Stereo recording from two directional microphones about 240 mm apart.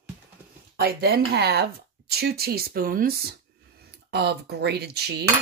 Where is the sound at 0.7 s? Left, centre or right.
Right.